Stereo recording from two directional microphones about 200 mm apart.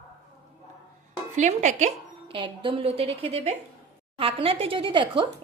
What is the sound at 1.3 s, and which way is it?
A woman's voice, 35° right (ahead or behind).